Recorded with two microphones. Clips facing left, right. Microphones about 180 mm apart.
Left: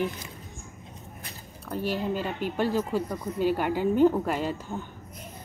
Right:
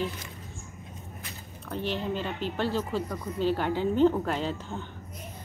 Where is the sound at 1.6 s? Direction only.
5° left (ahead or behind).